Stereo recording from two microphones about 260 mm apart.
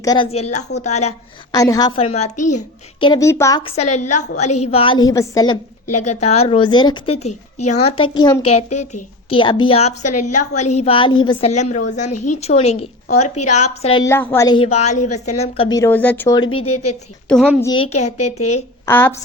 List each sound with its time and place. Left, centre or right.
0.0 s a woman's voice: centre
1.5 s a woman's voice: centre
3.1 s a woman's voice: centre
6.0 s a woman's voice: left
16.5 s a woman's voice: left
17.2 s a woman's voice: centre
17.6 s a woman's voice: centre
18.3 s a woman's voice: left
18.9 s a woman's voice: centre